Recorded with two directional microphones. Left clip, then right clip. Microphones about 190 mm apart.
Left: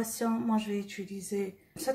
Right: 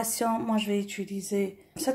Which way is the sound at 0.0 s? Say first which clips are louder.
Right 5 dB; 40° right (ahead or behind).